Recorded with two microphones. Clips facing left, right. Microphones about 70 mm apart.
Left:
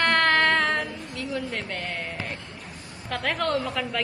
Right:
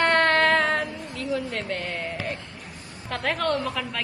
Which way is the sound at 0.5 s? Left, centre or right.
Centre.